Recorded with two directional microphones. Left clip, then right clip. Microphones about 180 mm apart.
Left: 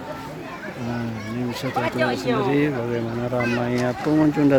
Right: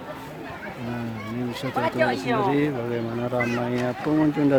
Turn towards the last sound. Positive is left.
turn(degrees=-5)  # may be behind; listen again after turning